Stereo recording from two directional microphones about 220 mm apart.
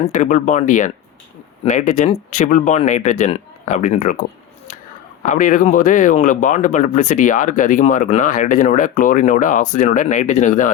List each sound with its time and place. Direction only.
0.0 s speech: 35° left (ahead or behind)